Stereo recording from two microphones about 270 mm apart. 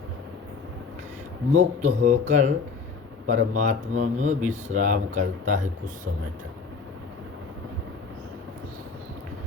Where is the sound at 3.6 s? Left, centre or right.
Right.